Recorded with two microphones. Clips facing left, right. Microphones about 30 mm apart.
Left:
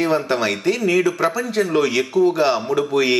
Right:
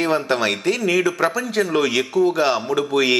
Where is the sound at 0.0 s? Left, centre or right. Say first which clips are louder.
Even; centre.